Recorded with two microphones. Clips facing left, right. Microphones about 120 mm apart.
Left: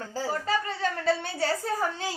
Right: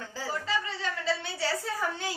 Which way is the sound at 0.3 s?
45° left (ahead or behind).